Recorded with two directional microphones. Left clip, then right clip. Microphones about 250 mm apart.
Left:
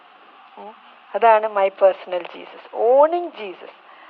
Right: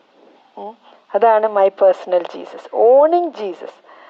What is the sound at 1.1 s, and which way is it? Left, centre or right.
A woman's voice, right.